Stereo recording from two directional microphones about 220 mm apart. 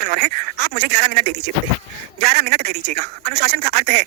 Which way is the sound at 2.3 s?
45° right (ahead or behind).